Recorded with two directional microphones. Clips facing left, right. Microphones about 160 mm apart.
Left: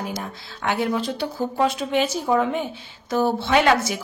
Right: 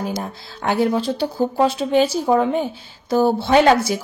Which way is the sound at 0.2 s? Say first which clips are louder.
Right 3 dB; 35° right (ahead or behind).